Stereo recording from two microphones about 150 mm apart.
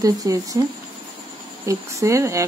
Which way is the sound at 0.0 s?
25° right (ahead or behind).